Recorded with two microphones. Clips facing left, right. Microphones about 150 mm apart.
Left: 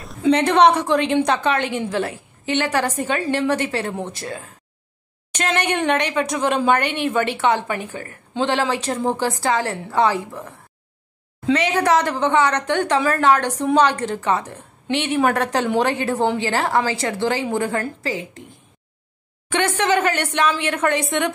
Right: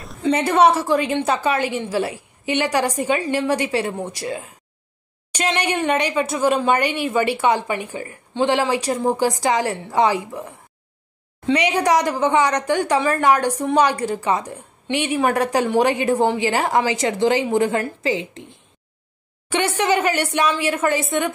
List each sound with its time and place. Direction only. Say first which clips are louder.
0.0 s a woman's voice: left 3 dB; centre (ahead or behind)
11.5 s speech: even; 15° right (ahead or behind)
19.5 s speech: even; 10° right (ahead or behind)